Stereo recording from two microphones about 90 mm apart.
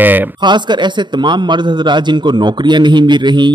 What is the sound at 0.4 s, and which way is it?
A man's voice, 55° right (ahead or behind).